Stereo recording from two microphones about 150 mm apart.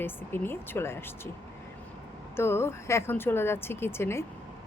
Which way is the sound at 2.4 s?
15° left (ahead or behind).